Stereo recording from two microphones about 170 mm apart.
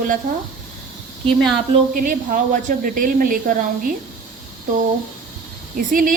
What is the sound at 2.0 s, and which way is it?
A woman's voice, 50° right (ahead or behind).